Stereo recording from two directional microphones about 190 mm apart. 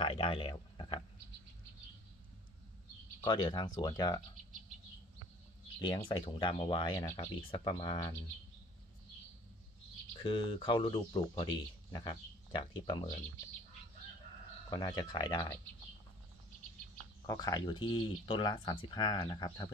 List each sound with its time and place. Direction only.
0.0 s speech: 30° left (ahead or behind)
3.3 s speech: 25° left (ahead or behind)
5.8 s speech: 25° left (ahead or behind)
10.1 s speech: 25° left (ahead or behind)
12.5 s speech: 25° left (ahead or behind)
14.7 s speech: 20° left (ahead or behind)
17.3 s speech: 20° left (ahead or behind)